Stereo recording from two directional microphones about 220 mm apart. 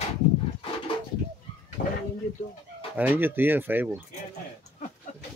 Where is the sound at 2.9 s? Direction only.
5° right (ahead or behind).